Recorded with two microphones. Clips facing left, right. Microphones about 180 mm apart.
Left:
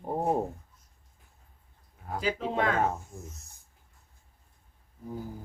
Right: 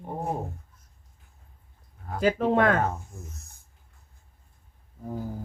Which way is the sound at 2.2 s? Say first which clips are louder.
Right 7 dB; 55° right (ahead or behind).